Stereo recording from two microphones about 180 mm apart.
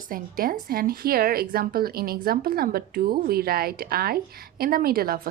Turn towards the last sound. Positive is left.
turn(degrees=-55)  # may be behind; listen again after turning